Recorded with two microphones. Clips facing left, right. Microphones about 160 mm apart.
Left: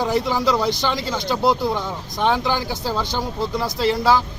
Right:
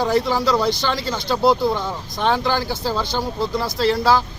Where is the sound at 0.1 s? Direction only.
15° left (ahead or behind).